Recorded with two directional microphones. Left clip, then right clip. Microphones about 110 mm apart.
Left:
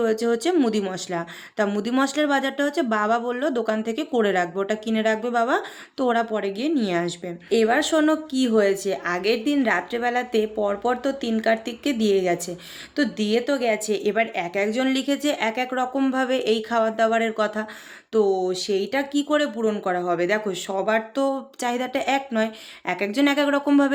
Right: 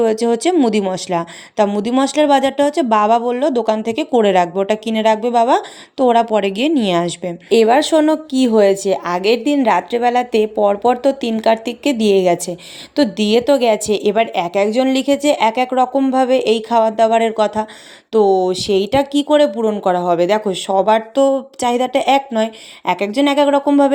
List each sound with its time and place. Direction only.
0.0 s speech: 45° right (ahead or behind)
6.2 s a woman's voice: 80° right; by 19.5 s 55° right (ahead or behind)
19.8 s a woman's voice: 65° right (ahead or behind); by 23.9 s 35° right (ahead or behind)